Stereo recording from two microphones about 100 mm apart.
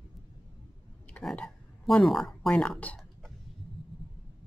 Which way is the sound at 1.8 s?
Centre (ahead or behind).